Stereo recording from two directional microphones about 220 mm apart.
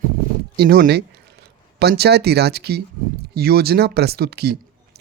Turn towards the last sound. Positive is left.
turn(degrees=-45)  # may be behind; listen again after turning